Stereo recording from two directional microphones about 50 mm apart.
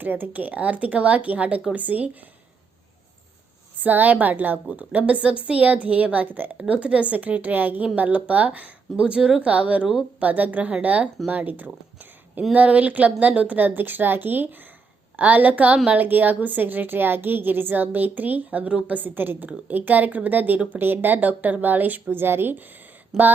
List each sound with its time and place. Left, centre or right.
0.0 s a woman's voice: right
3.8 s a woman's voice: right
6.6 s a woman's voice: right
22.1 s speech: right
23.1 s speech: centre